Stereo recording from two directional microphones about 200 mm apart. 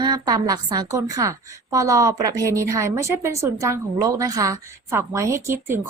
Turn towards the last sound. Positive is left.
turn(degrees=-15)  # may be behind; listen again after turning